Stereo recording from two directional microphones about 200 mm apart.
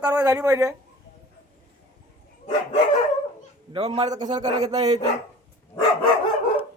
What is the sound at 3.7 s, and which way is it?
A man's voice, 25° right (ahead or behind).